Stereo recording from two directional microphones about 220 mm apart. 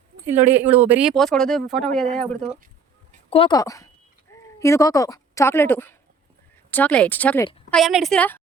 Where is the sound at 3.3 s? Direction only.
20° left (ahead or behind).